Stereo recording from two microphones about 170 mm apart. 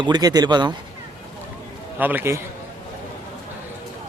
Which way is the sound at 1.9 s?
10° right (ahead or behind).